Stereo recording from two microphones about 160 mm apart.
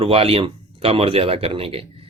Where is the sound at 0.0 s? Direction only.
35° right (ahead or behind).